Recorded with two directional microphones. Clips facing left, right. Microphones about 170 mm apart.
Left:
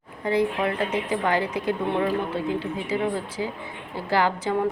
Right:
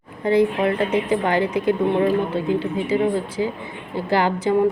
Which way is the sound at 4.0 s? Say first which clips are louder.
Right 3 dB; 20° right (ahead or behind).